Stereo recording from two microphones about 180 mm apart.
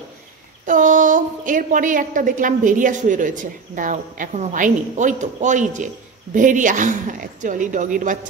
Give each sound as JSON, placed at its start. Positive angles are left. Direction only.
{"t": 0.7, "sound": "a woman's voice", "side_deg": -45}